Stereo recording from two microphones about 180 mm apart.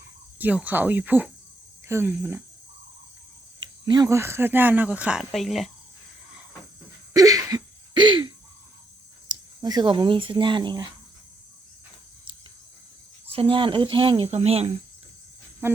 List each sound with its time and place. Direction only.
0.3 s speech: 10° right (ahead or behind)
3.6 s speech: 25° right (ahead or behind); by 5.7 s centre (ahead or behind)
7.1 s cough: 20° right (ahead or behind)
9.3 s speech: 20° right (ahead or behind)
13.3 s speech: 30° right (ahead or behind)
15.6 s speech: 10° right (ahead or behind)